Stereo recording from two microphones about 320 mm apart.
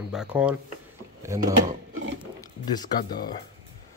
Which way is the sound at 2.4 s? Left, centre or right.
Centre.